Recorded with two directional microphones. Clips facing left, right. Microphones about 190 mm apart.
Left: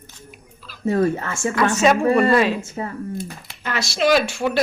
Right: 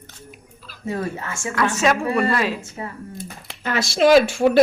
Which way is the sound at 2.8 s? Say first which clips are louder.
Left 4 dB; 40° left (ahead or behind).